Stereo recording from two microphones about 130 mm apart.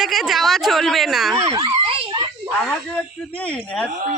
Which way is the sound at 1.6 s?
45° right (ahead or behind).